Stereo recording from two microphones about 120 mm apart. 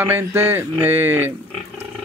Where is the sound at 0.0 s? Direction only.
15° right (ahead or behind).